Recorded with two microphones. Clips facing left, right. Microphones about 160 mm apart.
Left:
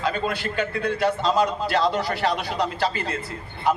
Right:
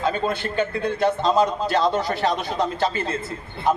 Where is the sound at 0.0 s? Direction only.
20° right (ahead or behind).